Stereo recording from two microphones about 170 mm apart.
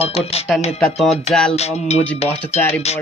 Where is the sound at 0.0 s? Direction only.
35° left (ahead or behind).